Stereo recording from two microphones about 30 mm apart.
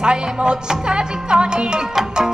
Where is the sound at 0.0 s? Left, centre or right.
Right.